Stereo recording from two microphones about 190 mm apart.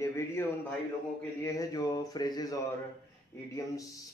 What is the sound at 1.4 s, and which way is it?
Speech, 20° left (ahead or behind).